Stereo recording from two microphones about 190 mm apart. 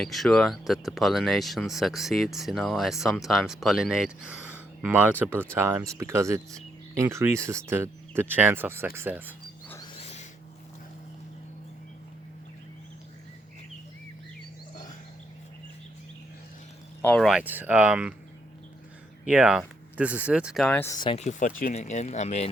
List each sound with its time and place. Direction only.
0.0 s speech: centre (ahead or behind)
9.8 s snort: 30° left (ahead or behind)
17.0 s speech: 5° left (ahead or behind)
19.2 s speech: 5° right (ahead or behind); by 21.0 s 10° left (ahead or behind)
21.0 s speech: 30° left (ahead or behind)